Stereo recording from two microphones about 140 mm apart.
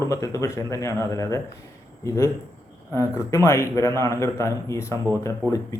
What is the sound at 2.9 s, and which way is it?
Speech, 20° left (ahead or behind).